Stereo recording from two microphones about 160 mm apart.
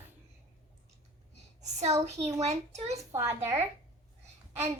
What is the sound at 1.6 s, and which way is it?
A child's voice, 45° right (ahead or behind).